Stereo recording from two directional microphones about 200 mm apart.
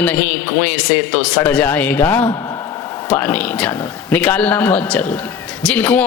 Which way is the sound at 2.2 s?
20° left (ahead or behind).